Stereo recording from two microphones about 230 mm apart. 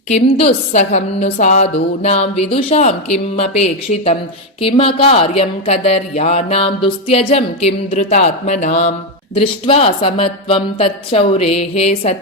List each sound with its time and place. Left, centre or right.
0.1 s speech: left